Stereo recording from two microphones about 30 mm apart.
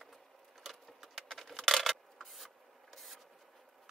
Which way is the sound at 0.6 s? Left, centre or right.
Centre.